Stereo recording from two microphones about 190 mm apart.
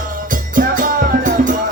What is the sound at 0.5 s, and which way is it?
Music, 45° right (ahead or behind).